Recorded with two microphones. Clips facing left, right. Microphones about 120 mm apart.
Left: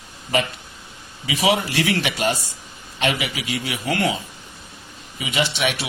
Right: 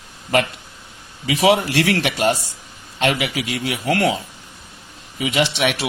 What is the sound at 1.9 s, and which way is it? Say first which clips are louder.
A man's voice: right 3 dB; 50° right (ahead or behind).